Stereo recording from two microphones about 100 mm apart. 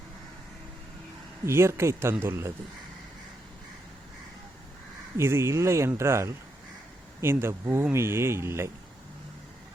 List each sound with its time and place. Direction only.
1.5 s speech: 25° right (ahead or behind)
5.1 s speech: 25° right (ahead or behind)